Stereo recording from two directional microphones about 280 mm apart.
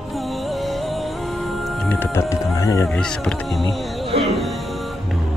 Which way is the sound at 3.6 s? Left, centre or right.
Centre.